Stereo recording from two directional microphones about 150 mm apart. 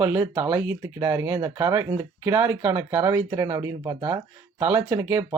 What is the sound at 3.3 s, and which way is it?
Speech, 25° right (ahead or behind).